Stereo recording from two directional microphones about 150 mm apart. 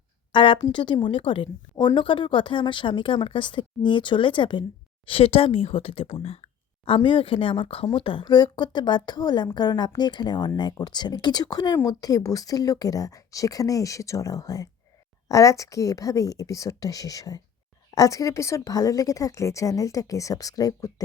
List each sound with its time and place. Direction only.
0.3 s a woman's voice: 35° left (ahead or behind)